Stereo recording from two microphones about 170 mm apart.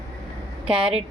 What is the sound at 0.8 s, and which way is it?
Speech, 5° right (ahead or behind).